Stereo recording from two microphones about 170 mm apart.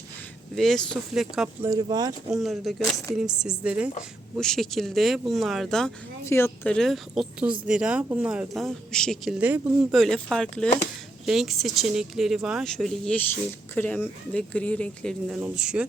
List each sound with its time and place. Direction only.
0.5 s speech: centre (ahead or behind)
1.6 s speech: 20° right (ahead or behind)
2.3 s speech: centre (ahead or behind)
6.2 s speech: 15° left (ahead or behind)
6.7 s speech: centre (ahead or behind)
15.3 s speech: 5° right (ahead or behind)